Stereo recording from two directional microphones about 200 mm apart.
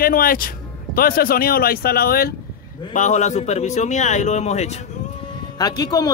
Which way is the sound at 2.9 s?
35° left (ahead or behind).